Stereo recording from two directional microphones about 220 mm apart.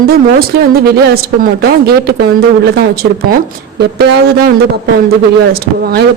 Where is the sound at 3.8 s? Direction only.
50° right (ahead or behind).